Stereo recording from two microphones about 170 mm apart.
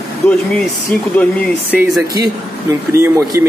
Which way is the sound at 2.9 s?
15° right (ahead or behind).